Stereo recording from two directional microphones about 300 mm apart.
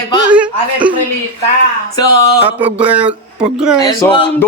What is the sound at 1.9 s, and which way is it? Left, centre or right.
Speech, centre.